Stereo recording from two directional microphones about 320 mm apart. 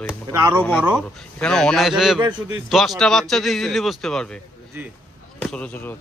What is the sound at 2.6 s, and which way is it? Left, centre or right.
A man's voice, centre.